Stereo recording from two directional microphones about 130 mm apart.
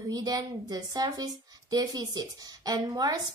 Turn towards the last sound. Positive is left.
turn(degrees=-30)  # may be behind; listen again after turning